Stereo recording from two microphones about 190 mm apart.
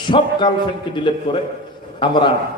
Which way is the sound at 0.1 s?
25° left (ahead or behind).